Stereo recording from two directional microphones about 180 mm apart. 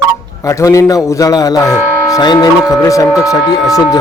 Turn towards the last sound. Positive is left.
turn(degrees=20)  # may be behind; listen again after turning